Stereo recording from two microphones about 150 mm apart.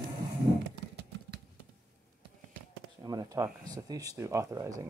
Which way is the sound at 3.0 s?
25° right (ahead or behind).